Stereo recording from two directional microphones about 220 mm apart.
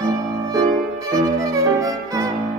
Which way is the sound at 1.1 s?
15° right (ahead or behind).